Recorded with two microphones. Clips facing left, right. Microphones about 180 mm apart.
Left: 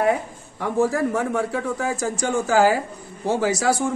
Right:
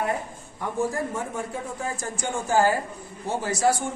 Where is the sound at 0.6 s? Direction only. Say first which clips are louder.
Left 6 dB; 90° left.